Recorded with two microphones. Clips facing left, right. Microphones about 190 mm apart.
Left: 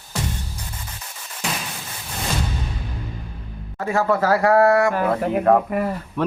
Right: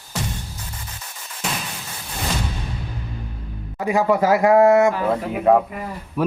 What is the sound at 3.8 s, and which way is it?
Speech, 15° right (ahead or behind).